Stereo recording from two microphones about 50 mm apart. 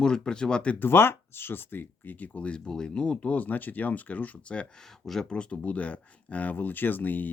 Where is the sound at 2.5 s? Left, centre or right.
Centre.